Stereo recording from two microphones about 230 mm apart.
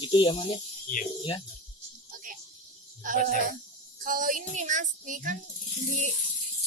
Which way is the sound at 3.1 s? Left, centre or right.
Right.